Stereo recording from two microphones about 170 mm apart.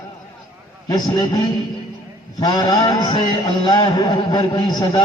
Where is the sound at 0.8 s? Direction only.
25° left (ahead or behind).